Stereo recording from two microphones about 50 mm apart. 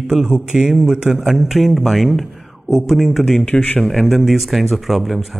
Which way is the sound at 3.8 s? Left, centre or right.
Centre.